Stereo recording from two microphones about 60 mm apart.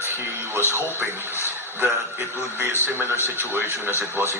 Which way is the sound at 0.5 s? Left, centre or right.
Right.